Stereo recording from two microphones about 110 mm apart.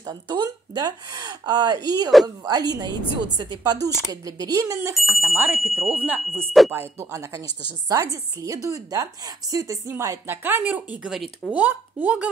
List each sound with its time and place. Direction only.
0.0 s speech: 40° right (ahead or behind)
5.0 s a woman's voice: 20° right (ahead or behind)
6.7 s a woman's voice: 25° right (ahead or behind)
11.1 s speech: centre (ahead or behind)
11.5 s speech: 15° right (ahead or behind)